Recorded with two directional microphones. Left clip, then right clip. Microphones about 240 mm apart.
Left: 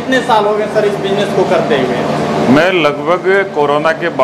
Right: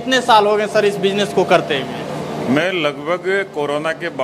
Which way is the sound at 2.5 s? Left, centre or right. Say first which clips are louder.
Left 6 dB; centre.